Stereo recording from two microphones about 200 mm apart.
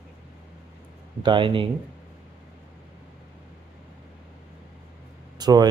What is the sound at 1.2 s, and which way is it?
Speech, 25° right (ahead or behind).